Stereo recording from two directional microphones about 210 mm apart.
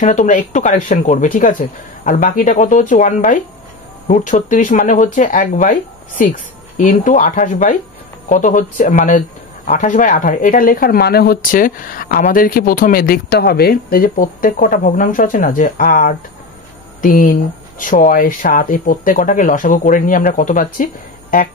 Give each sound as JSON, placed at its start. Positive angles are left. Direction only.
{"t": 0.0, "sound": "speech", "side_deg": 35}